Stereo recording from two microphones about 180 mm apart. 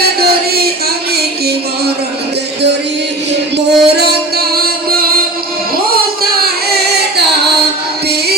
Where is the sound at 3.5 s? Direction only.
65° right (ahead or behind).